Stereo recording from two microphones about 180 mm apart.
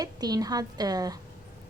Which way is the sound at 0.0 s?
20° right (ahead or behind).